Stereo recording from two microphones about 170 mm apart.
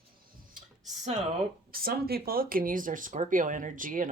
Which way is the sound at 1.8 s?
65° right (ahead or behind).